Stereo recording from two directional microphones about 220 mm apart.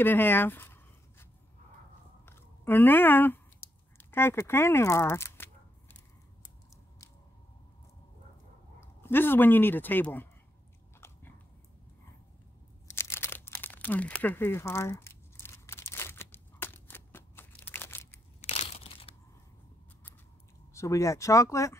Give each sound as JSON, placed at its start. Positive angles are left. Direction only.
{"t": 0.0, "sound": "speech", "side_deg": 10}
{"t": 2.2, "sound": "a sound", "side_deg": 10}
{"t": 8.8, "sound": "speech", "side_deg": 10}
{"t": 12.8, "sound": "a sound", "side_deg": 10}
{"t": 18.4, "sound": "crumpling", "side_deg": 30}
{"t": 20.7, "sound": "speech", "side_deg": 15}